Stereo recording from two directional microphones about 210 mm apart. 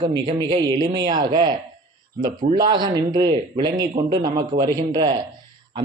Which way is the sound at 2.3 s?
40° right (ahead or behind).